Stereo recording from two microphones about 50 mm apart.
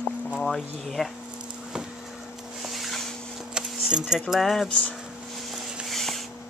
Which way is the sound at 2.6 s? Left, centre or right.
Centre.